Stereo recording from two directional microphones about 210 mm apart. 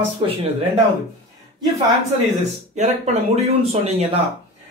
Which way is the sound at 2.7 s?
35° right (ahead or behind).